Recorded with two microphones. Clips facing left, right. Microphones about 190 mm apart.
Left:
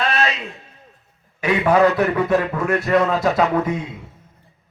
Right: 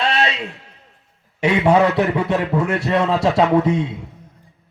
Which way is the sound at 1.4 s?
25° right (ahead or behind).